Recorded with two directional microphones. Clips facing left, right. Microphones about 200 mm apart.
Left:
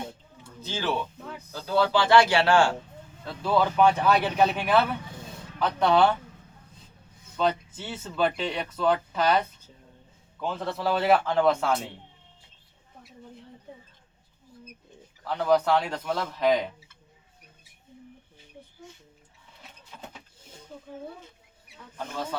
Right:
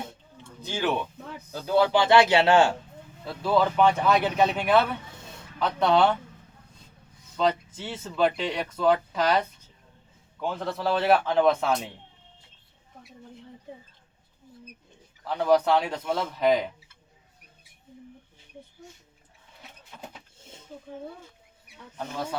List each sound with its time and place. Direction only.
0.6 s speech: 15° right (ahead or behind)
3.4 s speech: centre (ahead or behind)
7.3 s speech: 5° left (ahead or behind)
10.4 s speech: centre (ahead or behind)
15.4 s speech: 5° right (ahead or behind)